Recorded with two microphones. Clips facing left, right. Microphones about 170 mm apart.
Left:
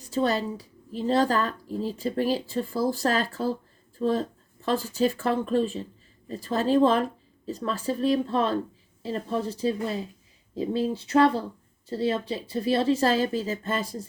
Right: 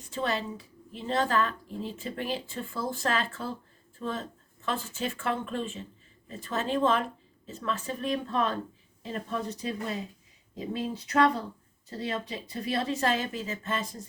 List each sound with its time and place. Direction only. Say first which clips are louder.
0.0 s a woman's voice: left 6 dB; 35° left (ahead or behind)